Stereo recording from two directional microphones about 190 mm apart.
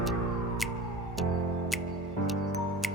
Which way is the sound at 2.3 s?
Centre (ahead or behind).